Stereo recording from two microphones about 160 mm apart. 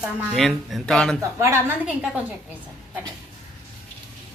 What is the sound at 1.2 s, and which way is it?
Speech, 15° right (ahead or behind).